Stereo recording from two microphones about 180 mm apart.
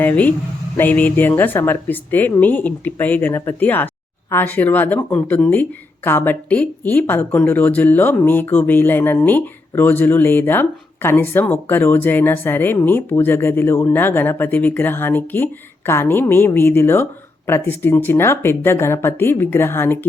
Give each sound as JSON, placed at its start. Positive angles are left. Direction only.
{"t": 0.0, "sound": "a woman's voice", "side_deg": 10}